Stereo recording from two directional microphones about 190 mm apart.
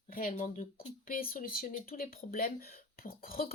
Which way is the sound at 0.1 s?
45° left (ahead or behind).